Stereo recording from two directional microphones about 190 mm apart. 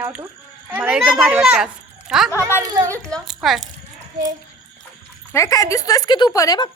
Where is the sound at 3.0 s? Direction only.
5° left (ahead or behind).